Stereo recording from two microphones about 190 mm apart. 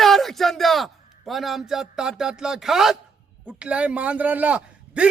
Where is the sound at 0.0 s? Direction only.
Centre (ahead or behind).